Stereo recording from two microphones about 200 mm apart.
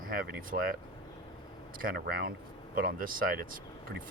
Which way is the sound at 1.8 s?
45° right (ahead or behind).